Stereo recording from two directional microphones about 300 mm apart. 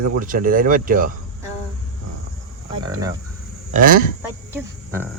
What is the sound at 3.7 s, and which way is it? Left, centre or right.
Speech, right.